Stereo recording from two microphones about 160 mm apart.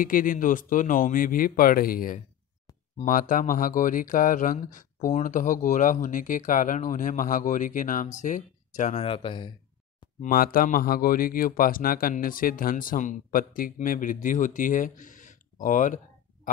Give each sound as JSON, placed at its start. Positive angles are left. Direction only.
{"t": 0.0, "sound": "speech", "side_deg": 60}
{"t": 10.2, "sound": "speech", "side_deg": 65}